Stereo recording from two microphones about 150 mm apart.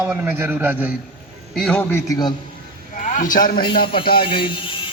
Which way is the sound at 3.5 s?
30° left (ahead or behind).